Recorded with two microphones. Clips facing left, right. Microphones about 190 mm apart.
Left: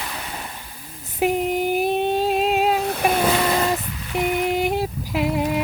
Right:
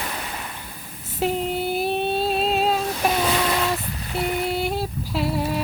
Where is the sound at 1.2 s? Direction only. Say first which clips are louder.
Left 3 dB; 15° left (ahead or behind).